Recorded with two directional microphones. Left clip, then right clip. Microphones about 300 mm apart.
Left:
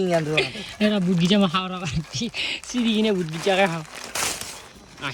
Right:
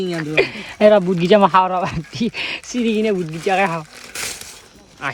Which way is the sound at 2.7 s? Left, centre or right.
Centre.